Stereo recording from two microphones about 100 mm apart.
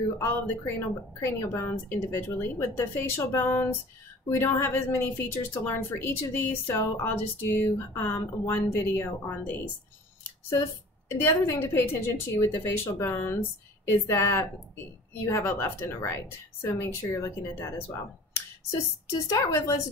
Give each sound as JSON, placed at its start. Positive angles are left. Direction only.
{"t": 0.2, "sound": "speech", "side_deg": 25}
{"t": 11.1, "sound": "speech", "side_deg": 25}
{"t": 18.7, "sound": "speech", "side_deg": 35}